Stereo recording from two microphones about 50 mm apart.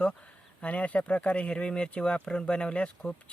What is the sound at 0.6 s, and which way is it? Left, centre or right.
Speech, left.